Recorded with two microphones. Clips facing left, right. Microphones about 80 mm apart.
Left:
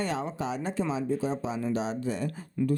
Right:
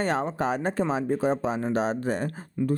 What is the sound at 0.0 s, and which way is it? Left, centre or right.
Speech, right.